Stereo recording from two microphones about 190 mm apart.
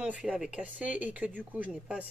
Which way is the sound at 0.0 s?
5° right (ahead or behind).